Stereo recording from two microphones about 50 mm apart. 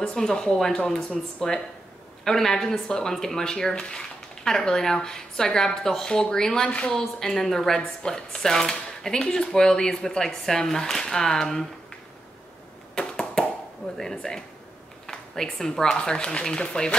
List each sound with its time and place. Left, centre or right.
0.0 s a woman's voice: centre
7.0 s speech: centre
12.9 s a sound: centre
13.9 s speech: centre
15.0 s a sound: centre
15.6 s speech: centre